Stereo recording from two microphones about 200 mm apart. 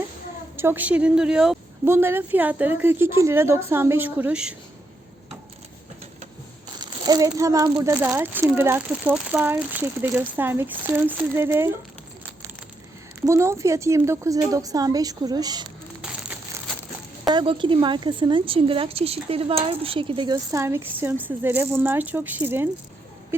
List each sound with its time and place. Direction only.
0.5 s speech: 10° right (ahead or behind)
6.7 s speech: 20° right (ahead or behind)
13.2 s speech: 15° right (ahead or behind)
16.0 s crumpling: 5° right (ahead or behind)
17.3 s a woman's voice: 25° right (ahead or behind)
23.3 s owl: 10° right (ahead or behind)